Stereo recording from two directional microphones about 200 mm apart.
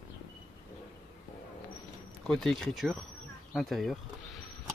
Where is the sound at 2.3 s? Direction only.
5° left (ahead or behind).